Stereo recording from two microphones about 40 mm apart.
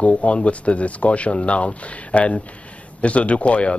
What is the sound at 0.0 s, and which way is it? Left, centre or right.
A man's voice, left.